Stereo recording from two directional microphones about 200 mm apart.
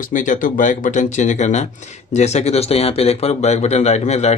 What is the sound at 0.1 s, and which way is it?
A man's voice, 40° left (ahead or behind).